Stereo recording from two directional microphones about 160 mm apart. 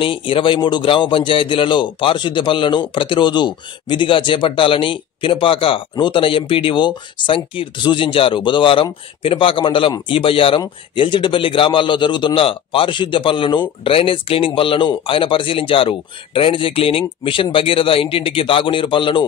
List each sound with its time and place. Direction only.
0.0 s a man's voice: 35° left (ahead or behind)